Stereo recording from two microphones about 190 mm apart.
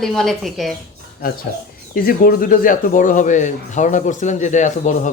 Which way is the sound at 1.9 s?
50° left (ahead or behind).